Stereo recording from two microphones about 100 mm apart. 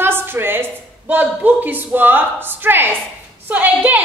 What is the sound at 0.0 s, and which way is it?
A woman's voice, 20° right (ahead or behind).